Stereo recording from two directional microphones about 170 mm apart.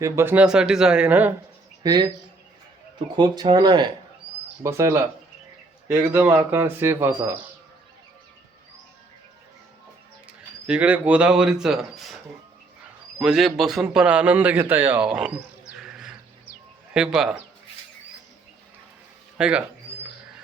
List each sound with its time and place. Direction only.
0.0 s speech: 15° right (ahead or behind)
1.8 s speech: 25° right (ahead or behind)
3.2 s speech: 25° right (ahead or behind)
10.7 s a man's voice: 10° right (ahead or behind)
19.4 s speech: 5° right (ahead or behind)